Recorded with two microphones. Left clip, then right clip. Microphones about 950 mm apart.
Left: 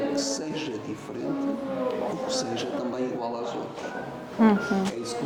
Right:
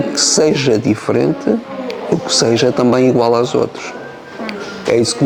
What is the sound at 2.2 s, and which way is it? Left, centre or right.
Speech, right.